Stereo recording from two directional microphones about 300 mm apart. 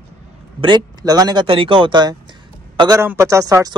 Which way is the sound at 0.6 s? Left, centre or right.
Centre.